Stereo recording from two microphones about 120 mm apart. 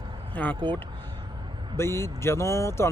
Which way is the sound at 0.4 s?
10° left (ahead or behind).